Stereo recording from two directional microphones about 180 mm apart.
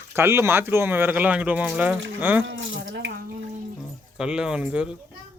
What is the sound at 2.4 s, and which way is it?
Water tap, 90° right.